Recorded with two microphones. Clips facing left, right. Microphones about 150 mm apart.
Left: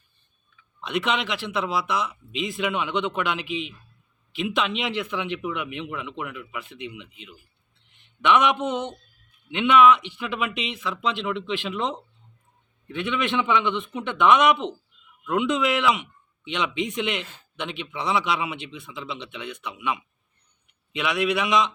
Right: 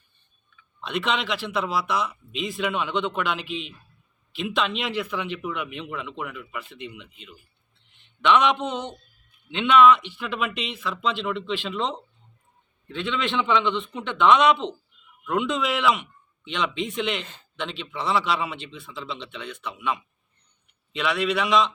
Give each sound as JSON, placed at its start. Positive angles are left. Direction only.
{"t": 0.8, "sound": "speech", "side_deg": 15}
{"t": 4.4, "sound": "speech", "side_deg": 15}
{"t": 8.2, "sound": "speech", "side_deg": 15}